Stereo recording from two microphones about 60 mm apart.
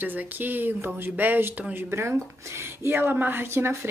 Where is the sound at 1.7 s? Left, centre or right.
Right.